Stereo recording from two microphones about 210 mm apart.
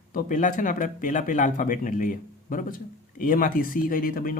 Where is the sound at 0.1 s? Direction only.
40° left (ahead or behind).